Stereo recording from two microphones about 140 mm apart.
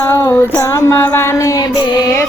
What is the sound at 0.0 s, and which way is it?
Female singing, 20° left (ahead or behind).